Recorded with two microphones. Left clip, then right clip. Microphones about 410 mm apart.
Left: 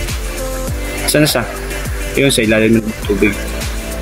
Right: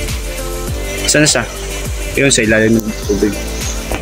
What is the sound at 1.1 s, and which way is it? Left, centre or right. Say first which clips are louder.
Speech: right 1 dB; left.